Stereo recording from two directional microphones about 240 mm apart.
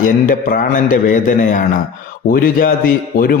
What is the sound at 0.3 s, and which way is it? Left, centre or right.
Mantra, left.